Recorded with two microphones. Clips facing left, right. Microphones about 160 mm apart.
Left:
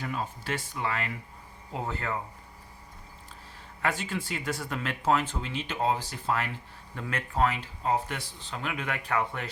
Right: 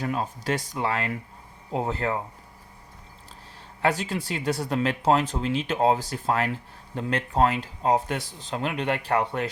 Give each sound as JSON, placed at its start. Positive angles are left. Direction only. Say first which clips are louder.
{"t": 0.0, "sound": "speech", "louder": "right 6 dB", "side_deg": -40}
{"t": 3.8, "sound": "speech", "louder": "right 5 dB", "side_deg": -35}